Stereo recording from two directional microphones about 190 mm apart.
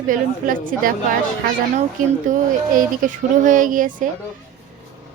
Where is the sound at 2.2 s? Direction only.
45° right (ahead or behind).